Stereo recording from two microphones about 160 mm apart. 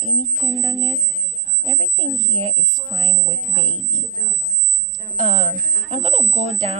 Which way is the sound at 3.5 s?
45° right (ahead or behind).